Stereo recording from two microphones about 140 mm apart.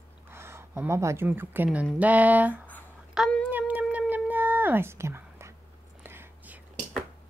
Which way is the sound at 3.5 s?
10° right (ahead or behind).